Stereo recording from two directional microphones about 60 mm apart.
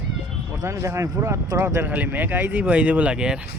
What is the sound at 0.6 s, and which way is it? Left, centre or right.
Speech, right.